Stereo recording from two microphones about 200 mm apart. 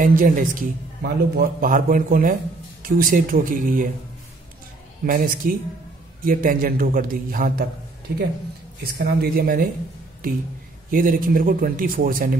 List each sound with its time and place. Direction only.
0.0 s a man's voice: 45° right (ahead or behind)
5.0 s a man's voice: 45° right (ahead or behind)
8.8 s a man's voice: 50° right (ahead or behind)
10.9 s a man's voice: 45° right (ahead or behind)